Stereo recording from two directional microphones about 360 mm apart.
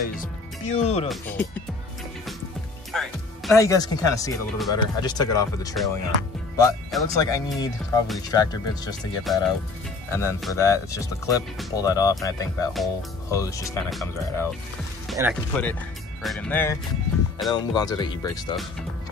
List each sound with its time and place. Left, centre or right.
0.0 s speech: left
1.0 s speech: centre
2.9 s speech: centre
10.1 s speech: centre